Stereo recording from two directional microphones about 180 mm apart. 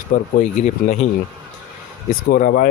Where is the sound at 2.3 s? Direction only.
50° left (ahead or behind).